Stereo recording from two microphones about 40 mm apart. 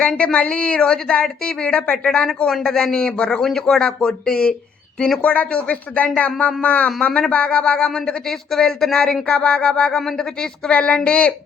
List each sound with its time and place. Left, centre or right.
0.1 s speech: left
3.4 s speech: centre
3.8 s speech: left
5.2 s speech: left
7.9 s speech: centre
9.2 s speech: left
9.9 s speech: centre
10.7 s speech: left